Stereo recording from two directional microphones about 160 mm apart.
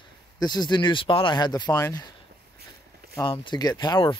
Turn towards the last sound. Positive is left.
turn(degrees=30)  # may be behind; listen again after turning